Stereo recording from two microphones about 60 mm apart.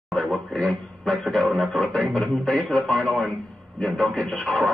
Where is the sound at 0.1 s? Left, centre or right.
Centre.